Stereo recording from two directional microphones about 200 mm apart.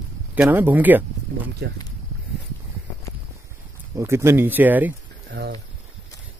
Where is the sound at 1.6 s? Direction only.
50° right (ahead or behind).